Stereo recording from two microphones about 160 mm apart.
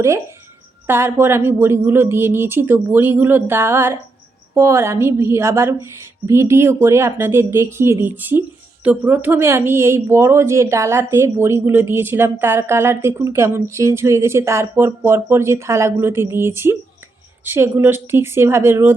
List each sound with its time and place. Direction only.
0.9 s a woman's voice: 15° right (ahead or behind)